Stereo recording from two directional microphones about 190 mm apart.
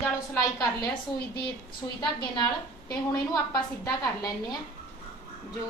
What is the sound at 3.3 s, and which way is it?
Speech, 15° left (ahead or behind).